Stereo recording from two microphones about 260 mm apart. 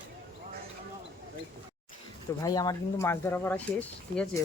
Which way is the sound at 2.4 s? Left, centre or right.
Centre.